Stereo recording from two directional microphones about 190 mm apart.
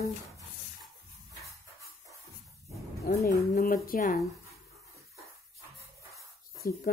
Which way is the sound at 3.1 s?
55° left (ahead or behind).